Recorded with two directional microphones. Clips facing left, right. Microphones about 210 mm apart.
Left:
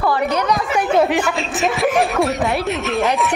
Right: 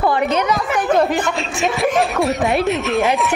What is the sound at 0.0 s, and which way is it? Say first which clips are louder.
Chatter: right 1 dB; 20° right (ahead or behind).